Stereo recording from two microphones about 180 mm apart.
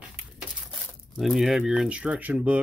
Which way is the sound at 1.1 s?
Centre (ahead or behind).